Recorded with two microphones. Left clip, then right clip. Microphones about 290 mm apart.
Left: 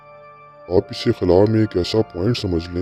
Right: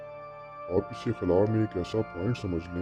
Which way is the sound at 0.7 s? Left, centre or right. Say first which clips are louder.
Left 11 dB; left.